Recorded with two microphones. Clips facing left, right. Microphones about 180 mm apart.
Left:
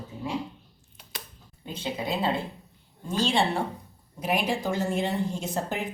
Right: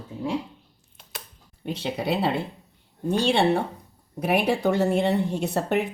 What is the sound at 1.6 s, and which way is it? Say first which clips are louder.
A woman's voice: right 5 dB; 75° right (ahead or behind).